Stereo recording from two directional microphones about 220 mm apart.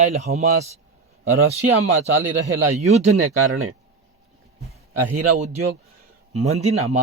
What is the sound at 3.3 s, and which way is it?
Speech, 80° right.